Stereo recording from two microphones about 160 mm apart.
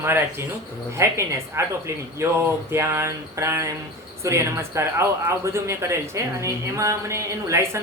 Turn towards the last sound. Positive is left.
turn(degrees=-15)  # may be behind; listen again after turning